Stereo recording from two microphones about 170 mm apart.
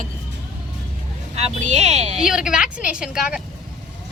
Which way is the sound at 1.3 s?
40° right (ahead or behind).